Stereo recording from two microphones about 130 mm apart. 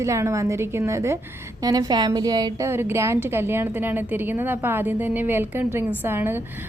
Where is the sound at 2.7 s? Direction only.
20° right (ahead or behind).